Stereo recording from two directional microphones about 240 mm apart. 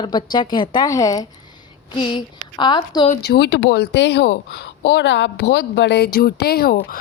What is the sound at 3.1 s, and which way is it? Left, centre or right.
A woman's voice, left.